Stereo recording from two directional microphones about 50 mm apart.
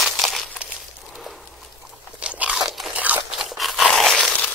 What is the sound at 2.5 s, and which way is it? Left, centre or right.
Crunch, centre.